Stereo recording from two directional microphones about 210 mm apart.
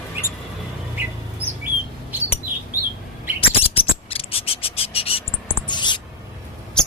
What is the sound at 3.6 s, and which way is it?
Frog, 25° left (ahead or behind).